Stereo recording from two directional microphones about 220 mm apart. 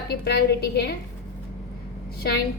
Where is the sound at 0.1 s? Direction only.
50° left (ahead or behind).